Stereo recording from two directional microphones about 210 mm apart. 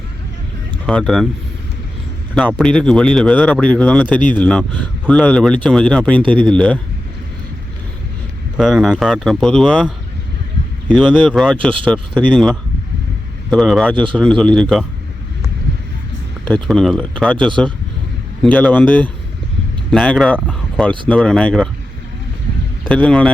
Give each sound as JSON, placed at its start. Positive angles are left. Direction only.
{"t": 0.9, "sound": "speech", "side_deg": 5}
{"t": 2.5, "sound": "speech", "side_deg": 0}
{"t": 6.2, "sound": "speech", "side_deg": -25}
{"t": 6.5, "sound": "speech", "side_deg": 5}
{"t": 8.5, "sound": "speech", "side_deg": 0}
{"t": 10.9, "sound": "speech", "side_deg": 0}
{"t": 13.9, "sound": "speech", "side_deg": -25}
{"t": 14.2, "sound": "speech", "side_deg": 5}
{"t": 16.6, "sound": "speech", "side_deg": 0}
{"t": 18.4, "sound": "speech", "side_deg": 5}
{"t": 22.9, "sound": "speech", "side_deg": 5}